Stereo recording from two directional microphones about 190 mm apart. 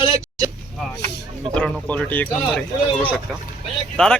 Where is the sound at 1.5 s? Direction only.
5° left (ahead or behind).